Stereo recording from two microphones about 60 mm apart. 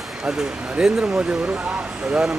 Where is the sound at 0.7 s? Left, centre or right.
Centre.